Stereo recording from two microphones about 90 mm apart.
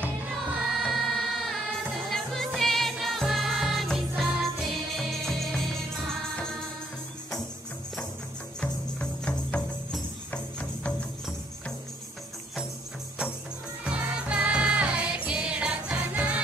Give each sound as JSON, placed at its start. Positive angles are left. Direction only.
{"t": 0.8, "sound": "music", "side_deg": 5}
{"t": 9.2, "sound": "music", "side_deg": 10}
{"t": 13.8, "sound": "music", "side_deg": -15}